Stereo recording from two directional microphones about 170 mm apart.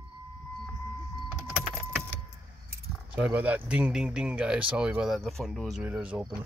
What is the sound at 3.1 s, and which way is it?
Speech, 10° right (ahead or behind).